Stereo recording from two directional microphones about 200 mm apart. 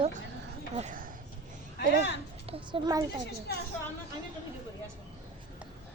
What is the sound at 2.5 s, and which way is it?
Speech, 20° right (ahead or behind).